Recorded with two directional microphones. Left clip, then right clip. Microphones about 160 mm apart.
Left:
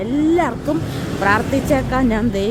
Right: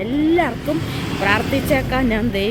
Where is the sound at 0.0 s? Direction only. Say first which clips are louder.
Left 1 dB; centre (ahead or behind).